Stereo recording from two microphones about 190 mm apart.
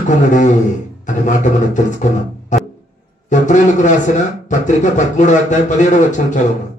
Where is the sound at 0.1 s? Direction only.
40° left (ahead or behind).